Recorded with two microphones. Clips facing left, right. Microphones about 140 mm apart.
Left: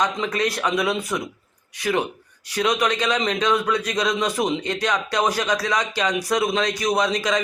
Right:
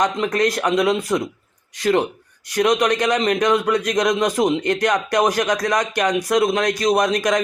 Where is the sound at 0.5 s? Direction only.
15° right (ahead or behind).